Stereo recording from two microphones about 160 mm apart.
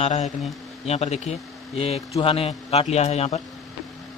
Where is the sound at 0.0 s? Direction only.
45° left (ahead or behind).